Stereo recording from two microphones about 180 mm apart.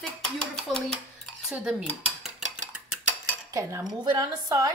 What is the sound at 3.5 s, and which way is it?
Cutlery, 20° right (ahead or behind).